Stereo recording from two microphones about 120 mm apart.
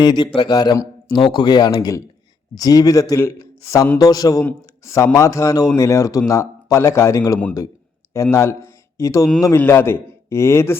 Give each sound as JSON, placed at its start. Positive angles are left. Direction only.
{"t": 0.0, "sound": "a man's voice", "side_deg": 40}
{"t": 4.4, "sound": "a man's voice", "side_deg": 20}